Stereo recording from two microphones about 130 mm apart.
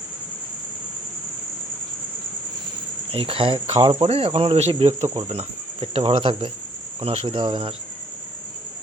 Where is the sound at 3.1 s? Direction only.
45° right (ahead or behind).